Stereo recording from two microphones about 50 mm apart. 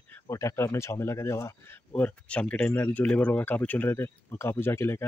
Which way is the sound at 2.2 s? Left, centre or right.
Left.